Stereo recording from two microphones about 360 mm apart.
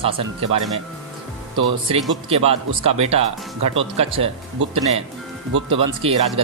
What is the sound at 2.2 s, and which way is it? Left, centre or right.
Speech, centre.